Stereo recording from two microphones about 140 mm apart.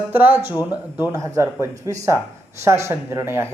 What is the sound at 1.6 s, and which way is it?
Speech, 20° right (ahead or behind).